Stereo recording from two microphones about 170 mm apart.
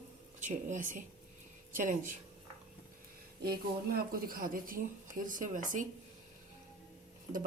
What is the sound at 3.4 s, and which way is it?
Speech, 65° right (ahead or behind).